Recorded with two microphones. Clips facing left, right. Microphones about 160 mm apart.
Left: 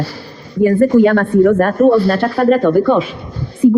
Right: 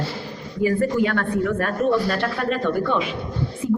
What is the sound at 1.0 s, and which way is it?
A man's voice, 45° left (ahead or behind).